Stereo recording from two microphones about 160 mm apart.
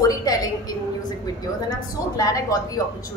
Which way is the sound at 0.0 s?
25° left (ahead or behind).